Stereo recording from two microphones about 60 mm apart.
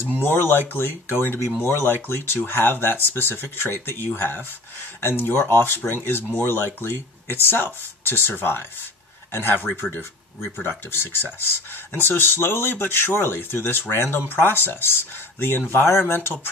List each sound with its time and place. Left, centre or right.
0.2 s speech: left